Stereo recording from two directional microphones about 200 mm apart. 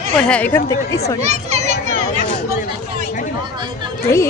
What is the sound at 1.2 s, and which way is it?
Children playing, 35° right (ahead or behind).